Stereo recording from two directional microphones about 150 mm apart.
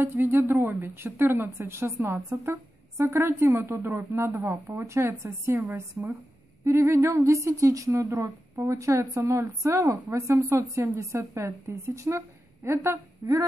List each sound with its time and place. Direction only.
0.0 s a woman's voice: 15° right (ahead or behind)